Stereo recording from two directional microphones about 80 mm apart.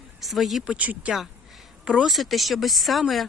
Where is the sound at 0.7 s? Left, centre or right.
Centre.